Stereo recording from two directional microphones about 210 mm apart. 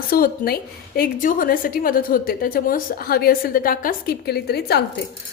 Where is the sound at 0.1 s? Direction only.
45° left (ahead or behind).